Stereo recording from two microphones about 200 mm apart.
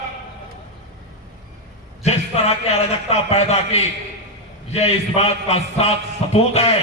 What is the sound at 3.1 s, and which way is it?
A man's voice, 30° left (ahead or behind).